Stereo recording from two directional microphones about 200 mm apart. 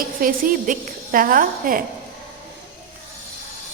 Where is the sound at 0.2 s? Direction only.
45° right (ahead or behind).